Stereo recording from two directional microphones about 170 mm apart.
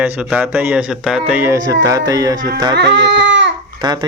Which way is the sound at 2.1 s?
20° right (ahead or behind).